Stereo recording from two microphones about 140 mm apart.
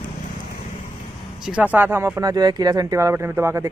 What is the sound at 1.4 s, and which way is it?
Speech, 10° right (ahead or behind).